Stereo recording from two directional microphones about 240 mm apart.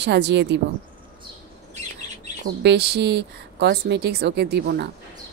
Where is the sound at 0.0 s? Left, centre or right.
Right.